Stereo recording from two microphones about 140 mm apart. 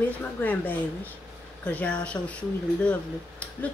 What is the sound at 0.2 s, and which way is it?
Speech, 10° left (ahead or behind).